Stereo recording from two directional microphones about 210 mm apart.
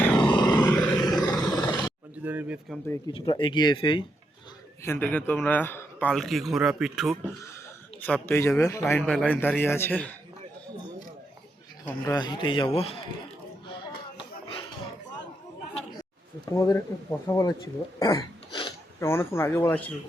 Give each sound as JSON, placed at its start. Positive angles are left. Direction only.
{"t": 0.2, "sound": "grunt", "side_deg": 20}
{"t": 0.6, "sound": "roar", "side_deg": 10}
{"t": 2.2, "sound": "speech", "side_deg": -5}
{"t": 3.1, "sound": "speech", "side_deg": 25}
{"t": 4.8, "sound": "a man's voice", "side_deg": 10}
{"t": 11.9, "sound": "speech", "side_deg": 15}
{"t": 16.5, "sound": "a man's voice", "side_deg": 15}
{"t": 18.0, "sound": "a sound", "side_deg": 15}
{"t": 18.9, "sound": "a man's voice", "side_deg": 10}